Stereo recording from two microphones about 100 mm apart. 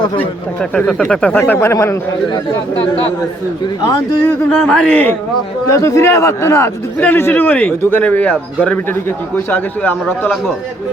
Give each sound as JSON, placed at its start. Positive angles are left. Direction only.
{"t": 0.2, "sound": "speech", "side_deg": 15}
{"t": 1.5, "sound": "a man's voice", "side_deg": 30}
{"t": 4.4, "sound": "speech", "side_deg": 10}
{"t": 5.7, "sound": "a man's voice", "side_deg": 30}